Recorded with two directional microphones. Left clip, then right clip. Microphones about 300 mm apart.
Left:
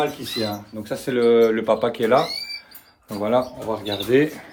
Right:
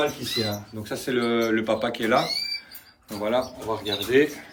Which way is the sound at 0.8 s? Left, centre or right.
Left.